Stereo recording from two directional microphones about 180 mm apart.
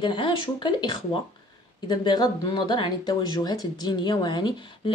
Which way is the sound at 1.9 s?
20° left (ahead or behind).